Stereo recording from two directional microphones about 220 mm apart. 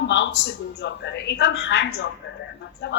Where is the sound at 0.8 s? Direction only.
50° left (ahead or behind).